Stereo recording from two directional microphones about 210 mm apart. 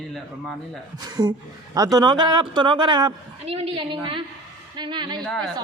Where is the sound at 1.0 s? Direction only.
20° right (ahead or behind).